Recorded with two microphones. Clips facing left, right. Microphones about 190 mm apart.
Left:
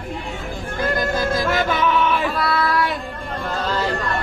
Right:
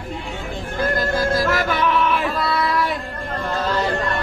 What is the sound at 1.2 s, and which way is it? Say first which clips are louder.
Music: right 1 dB; 20° left (ahead or behind).